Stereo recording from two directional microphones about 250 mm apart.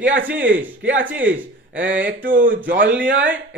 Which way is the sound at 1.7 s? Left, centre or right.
Right.